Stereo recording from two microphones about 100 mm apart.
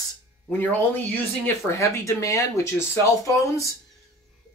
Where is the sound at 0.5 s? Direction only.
20° left (ahead or behind).